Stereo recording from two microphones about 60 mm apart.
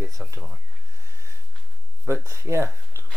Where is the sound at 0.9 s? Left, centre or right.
Right.